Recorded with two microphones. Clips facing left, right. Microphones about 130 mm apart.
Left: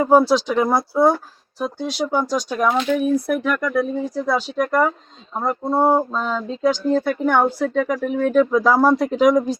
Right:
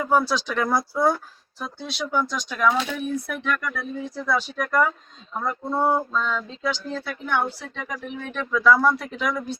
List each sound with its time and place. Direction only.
0.0 s speech: 35° left (ahead or behind)
0.3 s speech: 15° left (ahead or behind); by 9.6 s 40° left (ahead or behind)